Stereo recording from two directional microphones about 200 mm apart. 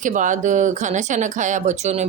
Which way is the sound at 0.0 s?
40° right (ahead or behind).